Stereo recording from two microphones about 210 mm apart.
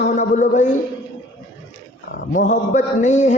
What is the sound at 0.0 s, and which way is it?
Mantra, 40° left (ahead or behind).